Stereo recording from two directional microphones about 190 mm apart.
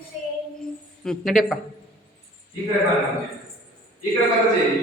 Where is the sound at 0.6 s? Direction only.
5° left (ahead or behind).